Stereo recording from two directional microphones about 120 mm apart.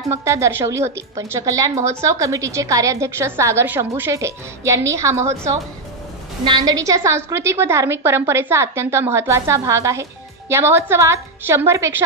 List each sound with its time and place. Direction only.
0.1 s a woman's voice: 25° right (ahead or behind)
6.4 s a woman's voice: 35° right (ahead or behind)